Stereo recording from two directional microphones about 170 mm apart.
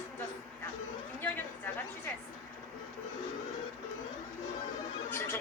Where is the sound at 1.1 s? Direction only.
10° left (ahead or behind).